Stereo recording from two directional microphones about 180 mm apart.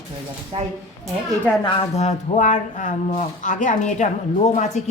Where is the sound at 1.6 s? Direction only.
35° left (ahead or behind).